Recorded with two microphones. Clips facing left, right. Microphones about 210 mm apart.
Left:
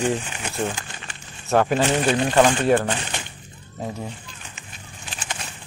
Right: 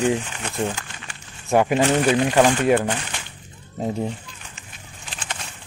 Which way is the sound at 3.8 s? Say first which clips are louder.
Right 6 dB; 25° right (ahead or behind).